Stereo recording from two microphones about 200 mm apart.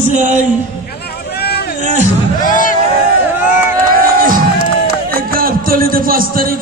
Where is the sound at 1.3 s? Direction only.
55° left (ahead or behind).